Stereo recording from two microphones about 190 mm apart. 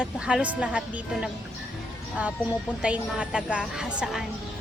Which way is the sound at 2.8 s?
5° right (ahead or behind).